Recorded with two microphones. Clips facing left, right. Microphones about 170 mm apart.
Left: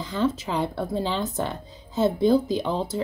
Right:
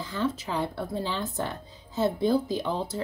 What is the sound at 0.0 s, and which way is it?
Speech, 20° left (ahead or behind).